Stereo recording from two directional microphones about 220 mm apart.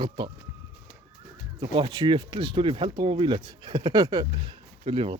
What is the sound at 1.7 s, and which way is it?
Speech, 25° right (ahead or behind).